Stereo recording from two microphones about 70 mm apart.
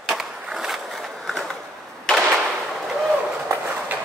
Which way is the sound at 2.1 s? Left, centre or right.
Centre.